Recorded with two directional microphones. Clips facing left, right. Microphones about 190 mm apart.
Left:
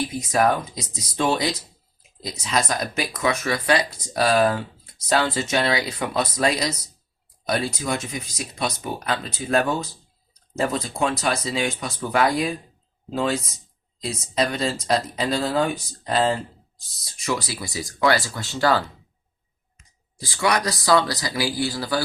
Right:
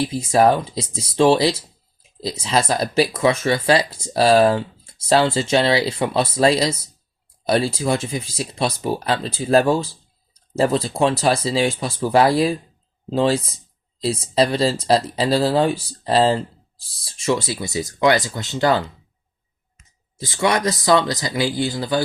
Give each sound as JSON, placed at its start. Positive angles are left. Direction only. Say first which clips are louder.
{"t": 0.0, "sound": "speech", "louder": "right 5 dB", "side_deg": -30}
{"t": 20.1, "sound": "speech", "louder": "right 3 dB", "side_deg": -20}